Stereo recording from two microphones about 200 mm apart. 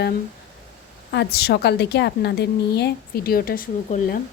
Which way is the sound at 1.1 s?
55° left (ahead or behind).